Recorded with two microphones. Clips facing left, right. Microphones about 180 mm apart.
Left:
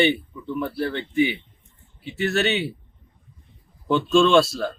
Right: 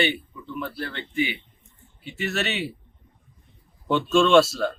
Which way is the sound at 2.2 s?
Centre (ahead or behind).